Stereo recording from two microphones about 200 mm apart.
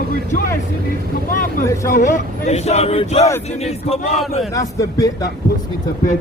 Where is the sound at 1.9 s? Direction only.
40° left (ahead or behind).